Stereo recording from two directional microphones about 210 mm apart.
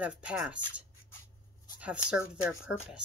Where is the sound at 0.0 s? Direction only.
5° right (ahead or behind).